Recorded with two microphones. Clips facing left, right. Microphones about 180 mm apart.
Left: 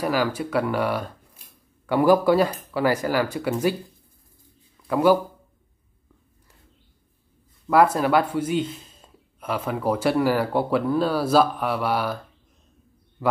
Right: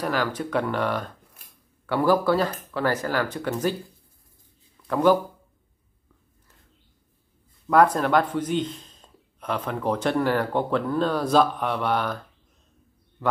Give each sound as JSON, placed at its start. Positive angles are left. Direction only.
{"t": 0.0, "sound": "speech", "side_deg": 10}
{"t": 4.8, "sound": "speech", "side_deg": 5}
{"t": 7.6, "sound": "speech", "side_deg": 5}